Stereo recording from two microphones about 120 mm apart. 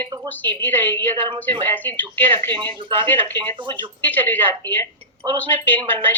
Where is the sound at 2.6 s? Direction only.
45° right (ahead or behind).